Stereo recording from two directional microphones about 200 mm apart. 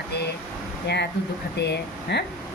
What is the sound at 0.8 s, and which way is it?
Speech, 60° left (ahead or behind).